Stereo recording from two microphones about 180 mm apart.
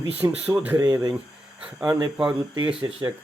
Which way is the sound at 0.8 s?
20° right (ahead or behind).